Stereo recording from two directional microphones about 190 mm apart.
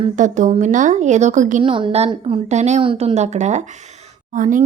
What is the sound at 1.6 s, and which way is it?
A woman's voice, 25° right (ahead or behind).